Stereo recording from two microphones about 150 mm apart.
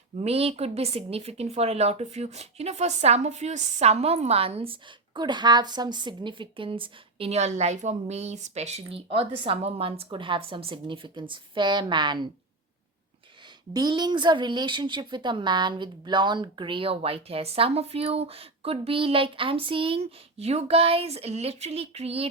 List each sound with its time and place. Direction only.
0.2 s speech: 40° right (ahead or behind)
13.7 s speech: 30° right (ahead or behind)